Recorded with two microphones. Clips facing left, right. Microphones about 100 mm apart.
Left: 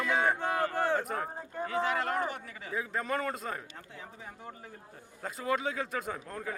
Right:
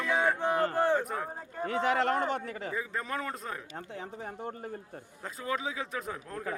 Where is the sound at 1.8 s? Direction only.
25° right (ahead or behind).